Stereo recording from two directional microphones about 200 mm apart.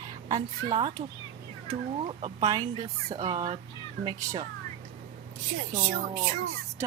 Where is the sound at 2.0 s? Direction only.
25° right (ahead or behind).